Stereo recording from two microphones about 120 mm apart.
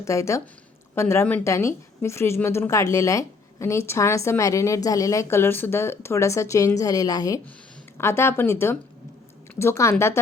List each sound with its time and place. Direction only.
0.0 s speech: 25° left (ahead or behind)